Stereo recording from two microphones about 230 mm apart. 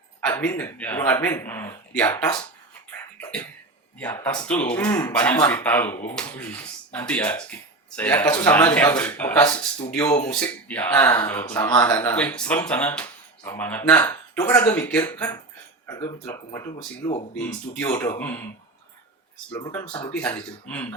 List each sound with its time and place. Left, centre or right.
0.3 s speech: centre
2.9 s cough: centre
4.0 s speech: centre
19.5 s speech: centre
20.1 s speech: centre